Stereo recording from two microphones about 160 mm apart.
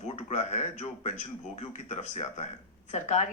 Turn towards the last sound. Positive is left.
turn(degrees=45)  # may be behind; listen again after turning